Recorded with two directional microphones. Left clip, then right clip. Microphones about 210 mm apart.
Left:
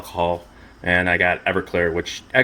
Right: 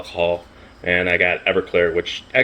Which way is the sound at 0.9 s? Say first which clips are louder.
Right 1 dB; 60° left (ahead or behind).